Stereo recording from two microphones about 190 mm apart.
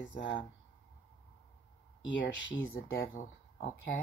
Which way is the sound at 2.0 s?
75° left (ahead or behind).